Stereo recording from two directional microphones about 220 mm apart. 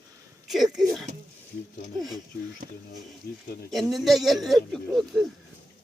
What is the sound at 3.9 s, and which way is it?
Speech, centre (ahead or behind).